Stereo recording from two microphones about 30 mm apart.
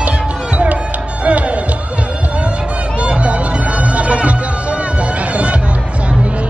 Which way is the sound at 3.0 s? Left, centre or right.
Right.